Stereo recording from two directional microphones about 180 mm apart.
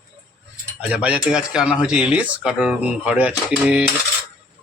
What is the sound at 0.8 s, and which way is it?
Speech, 5° right (ahead or behind).